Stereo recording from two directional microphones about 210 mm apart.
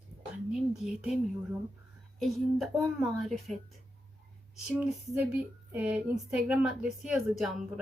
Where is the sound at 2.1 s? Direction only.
Centre (ahead or behind).